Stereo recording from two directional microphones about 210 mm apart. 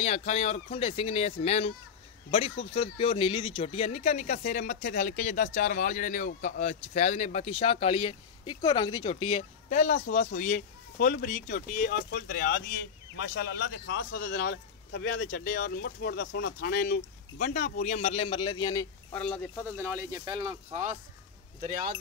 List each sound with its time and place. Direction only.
0.0 s speech: 30° left (ahead or behind)
19.8 s speech: 15° right (ahead or behind); by 21.0 s 35° right (ahead or behind)